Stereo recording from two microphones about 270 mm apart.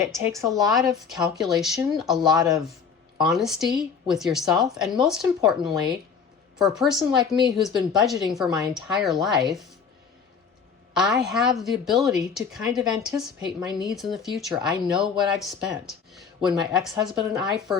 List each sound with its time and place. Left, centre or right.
0.5 s a woman's voice: centre
2.2 s speech: centre
3.2 s a woman's voice: centre
10.9 s a woman's voice: centre
16.1 s a woman's voice: centre